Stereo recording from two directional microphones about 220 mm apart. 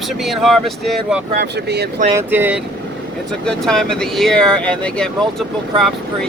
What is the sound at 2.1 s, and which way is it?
Speech, 10° right (ahead or behind).